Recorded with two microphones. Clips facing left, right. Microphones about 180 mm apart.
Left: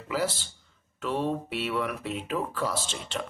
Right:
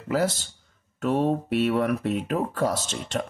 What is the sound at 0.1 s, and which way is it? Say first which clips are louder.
Speech: right 5 dB; 45° right (ahead or behind).